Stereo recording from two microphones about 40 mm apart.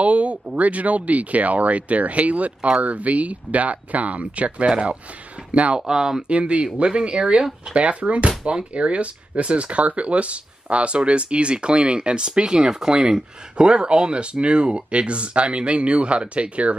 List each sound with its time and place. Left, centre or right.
0.0 s speech: right
5.8 s speech: centre
6.2 s speech: right